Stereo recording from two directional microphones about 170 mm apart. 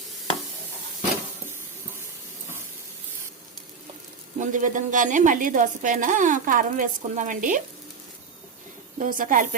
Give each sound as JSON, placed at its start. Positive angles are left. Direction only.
{"t": 4.4, "sound": "a woman's voice", "side_deg": -50}
{"t": 9.0, "sound": "a woman's voice", "side_deg": -50}